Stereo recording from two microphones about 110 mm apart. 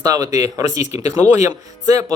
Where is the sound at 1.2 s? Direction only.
15° left (ahead or behind).